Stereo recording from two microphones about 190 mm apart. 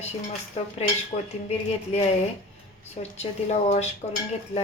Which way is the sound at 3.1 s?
35° left (ahead or behind).